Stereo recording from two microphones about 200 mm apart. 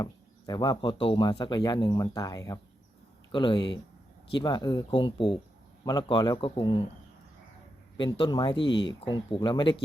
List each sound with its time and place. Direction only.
0.0 s speech: 20° left (ahead or behind)
8.2 s speech: 25° left (ahead or behind)